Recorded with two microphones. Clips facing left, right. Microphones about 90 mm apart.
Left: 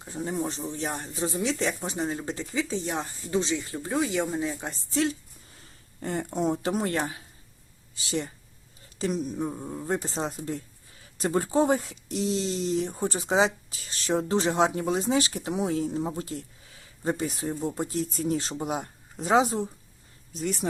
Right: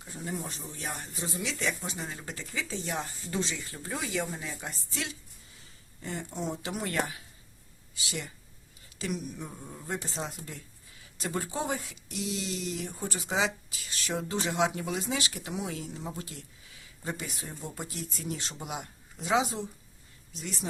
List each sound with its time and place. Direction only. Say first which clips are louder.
0.0 s speech: left 7 dB; 30° left (ahead or behind)
6.0 s speech: left 8 dB; 50° left (ahead or behind); by 7.2 s 30° left (ahead or behind)
9.0 s speech: left 7 dB; 30° left (ahead or behind)